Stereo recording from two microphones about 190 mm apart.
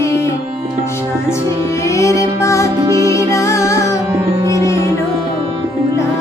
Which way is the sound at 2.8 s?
20° right (ahead or behind).